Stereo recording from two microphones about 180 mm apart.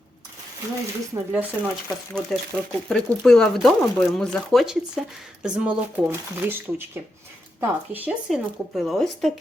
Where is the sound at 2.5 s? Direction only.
5° left (ahead or behind).